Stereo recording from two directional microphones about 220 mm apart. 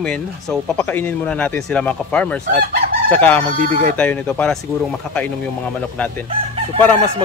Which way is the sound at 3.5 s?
40° right (ahead or behind).